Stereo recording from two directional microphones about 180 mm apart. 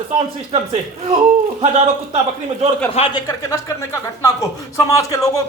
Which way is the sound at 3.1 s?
20° left (ahead or behind).